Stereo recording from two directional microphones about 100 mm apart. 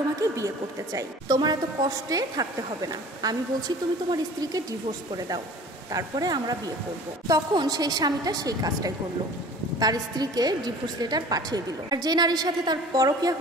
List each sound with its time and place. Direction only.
0.2 s a woman's voice: 35° right (ahead or behind)
0.9 s a woman's voice: 45° right (ahead or behind)
5.9 s a woman's voice: 35° right (ahead or behind)